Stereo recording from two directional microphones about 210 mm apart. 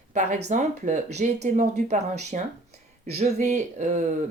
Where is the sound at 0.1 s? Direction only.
35° right (ahead or behind).